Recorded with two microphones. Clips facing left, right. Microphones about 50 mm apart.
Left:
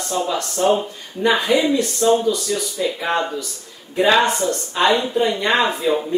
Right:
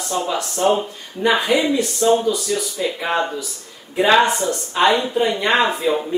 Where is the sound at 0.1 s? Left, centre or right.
Centre.